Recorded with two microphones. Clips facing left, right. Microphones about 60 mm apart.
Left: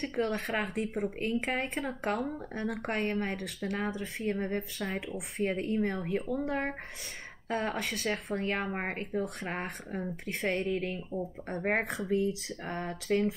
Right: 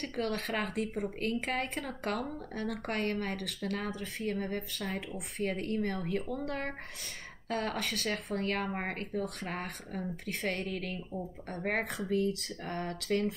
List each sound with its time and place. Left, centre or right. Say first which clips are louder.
0.1 s speech: left 2 dB; centre
12.1 s speech: left 1 dB; centre